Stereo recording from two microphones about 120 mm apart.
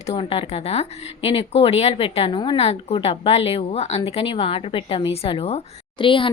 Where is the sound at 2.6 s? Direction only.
60° left (ahead or behind).